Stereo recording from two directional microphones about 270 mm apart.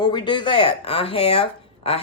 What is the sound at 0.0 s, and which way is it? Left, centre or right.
Speech, centre.